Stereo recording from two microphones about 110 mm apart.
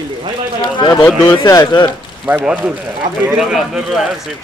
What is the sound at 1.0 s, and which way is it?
Speech, 25° left (ahead or behind).